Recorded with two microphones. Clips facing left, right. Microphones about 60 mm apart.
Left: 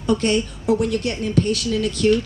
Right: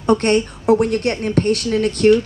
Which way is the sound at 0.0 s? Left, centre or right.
Right.